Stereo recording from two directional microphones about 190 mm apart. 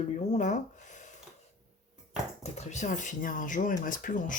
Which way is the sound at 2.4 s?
35° left (ahead or behind).